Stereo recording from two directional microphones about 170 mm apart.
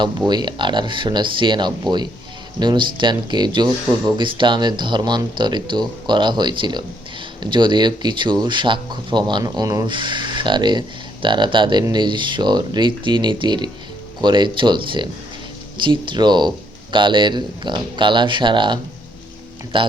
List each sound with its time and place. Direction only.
0.3 s speech: 25° right (ahead or behind)